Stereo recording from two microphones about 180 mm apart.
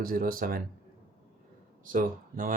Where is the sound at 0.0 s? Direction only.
55° right (ahead or behind).